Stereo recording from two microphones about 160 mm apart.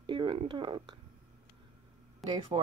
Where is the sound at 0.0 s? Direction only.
30° right (ahead or behind).